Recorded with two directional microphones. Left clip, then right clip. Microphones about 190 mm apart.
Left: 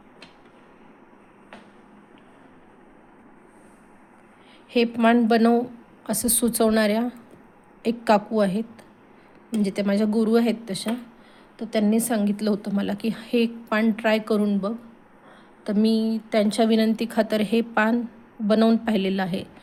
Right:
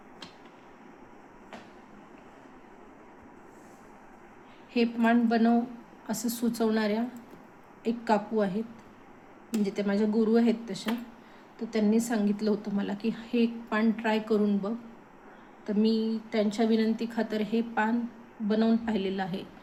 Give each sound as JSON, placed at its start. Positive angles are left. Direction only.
{"t": 4.7, "sound": "speech", "side_deg": 60}
{"t": 9.6, "sound": "speech", "side_deg": 60}